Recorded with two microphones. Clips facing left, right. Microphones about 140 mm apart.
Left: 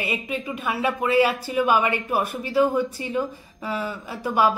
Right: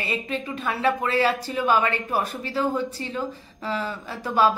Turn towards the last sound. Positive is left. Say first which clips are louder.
# even
turn(degrees=15)  # may be behind; listen again after turning